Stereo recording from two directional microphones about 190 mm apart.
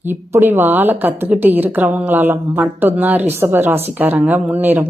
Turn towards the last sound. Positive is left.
turn(degrees=-10)  # may be behind; listen again after turning